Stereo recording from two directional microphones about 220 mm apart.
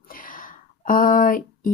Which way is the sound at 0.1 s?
40° left (ahead or behind).